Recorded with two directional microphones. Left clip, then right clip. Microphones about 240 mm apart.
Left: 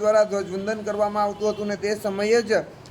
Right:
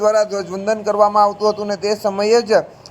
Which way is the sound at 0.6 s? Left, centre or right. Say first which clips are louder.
Right 12 dB; centre.